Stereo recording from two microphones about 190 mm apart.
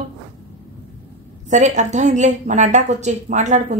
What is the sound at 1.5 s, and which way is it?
A woman's voice, 40° right (ahead or behind).